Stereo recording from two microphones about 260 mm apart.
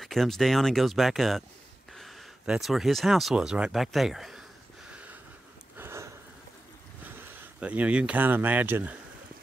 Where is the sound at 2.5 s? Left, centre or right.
Centre.